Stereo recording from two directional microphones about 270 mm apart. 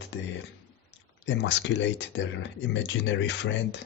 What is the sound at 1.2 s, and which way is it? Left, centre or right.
Speech, left.